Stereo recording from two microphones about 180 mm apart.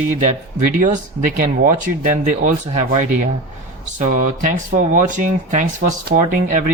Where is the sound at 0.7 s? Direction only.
45° right (ahead or behind).